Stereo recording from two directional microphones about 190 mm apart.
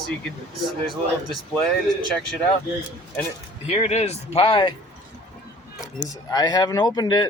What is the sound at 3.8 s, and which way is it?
Speech, 35° left (ahead or behind).